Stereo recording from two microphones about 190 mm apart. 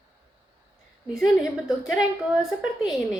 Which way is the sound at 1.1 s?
5° right (ahead or behind).